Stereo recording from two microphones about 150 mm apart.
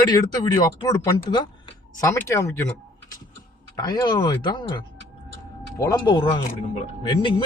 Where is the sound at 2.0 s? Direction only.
20° left (ahead or behind).